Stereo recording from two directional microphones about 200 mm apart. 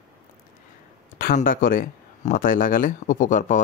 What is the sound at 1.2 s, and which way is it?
Speech, 45° left (ahead or behind).